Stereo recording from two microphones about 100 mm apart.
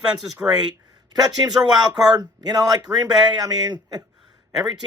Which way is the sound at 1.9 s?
40° right (ahead or behind).